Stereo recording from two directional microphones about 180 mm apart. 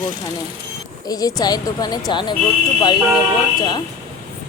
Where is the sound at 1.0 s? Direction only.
20° left (ahead or behind).